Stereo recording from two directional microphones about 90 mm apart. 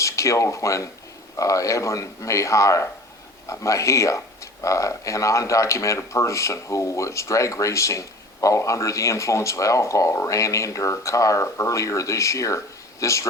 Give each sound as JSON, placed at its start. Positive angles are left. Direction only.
{"t": 0.0, "sound": "speech", "side_deg": 35}